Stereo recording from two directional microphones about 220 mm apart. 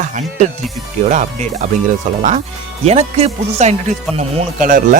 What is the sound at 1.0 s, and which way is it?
Speech, 35° right (ahead or behind).